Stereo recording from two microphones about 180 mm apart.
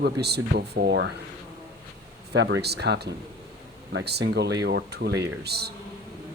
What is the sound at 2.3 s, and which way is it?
Speech, 70° right (ahead or behind).